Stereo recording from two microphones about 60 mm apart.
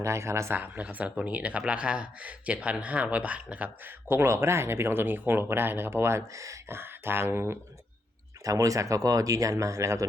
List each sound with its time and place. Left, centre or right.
0.0 s speech: right
0.5 s speech: right
4.1 s speech: right
6.7 s speech: right
8.4 s speech: right